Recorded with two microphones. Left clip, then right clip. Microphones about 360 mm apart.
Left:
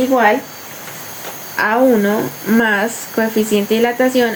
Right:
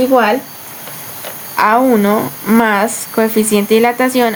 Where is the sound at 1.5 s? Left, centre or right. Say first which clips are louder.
Right 2 dB; centre.